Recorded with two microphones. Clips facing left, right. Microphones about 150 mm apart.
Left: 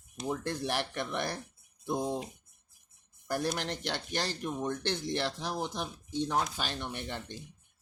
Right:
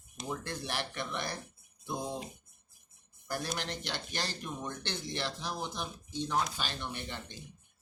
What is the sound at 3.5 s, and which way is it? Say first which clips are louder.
Speech: left 3 dB; 55° left (ahead or behind).